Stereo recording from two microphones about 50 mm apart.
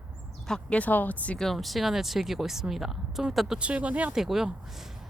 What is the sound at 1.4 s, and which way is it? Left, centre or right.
Speech, centre.